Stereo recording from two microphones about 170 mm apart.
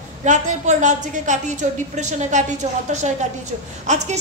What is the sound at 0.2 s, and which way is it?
A woman's voice, 45° right (ahead or behind).